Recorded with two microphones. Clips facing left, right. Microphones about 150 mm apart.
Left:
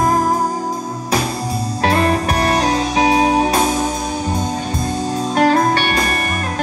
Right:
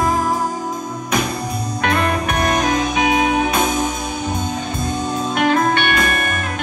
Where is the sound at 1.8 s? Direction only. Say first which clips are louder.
Left 3 dB; 35° left (ahead or behind).